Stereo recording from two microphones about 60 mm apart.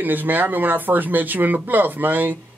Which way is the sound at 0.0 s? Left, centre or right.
Right.